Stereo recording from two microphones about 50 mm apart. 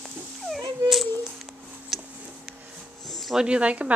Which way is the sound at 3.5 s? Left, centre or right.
Right.